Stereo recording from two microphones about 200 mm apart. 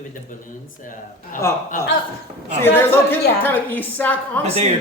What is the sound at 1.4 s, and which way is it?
Speech, 15° left (ahead or behind).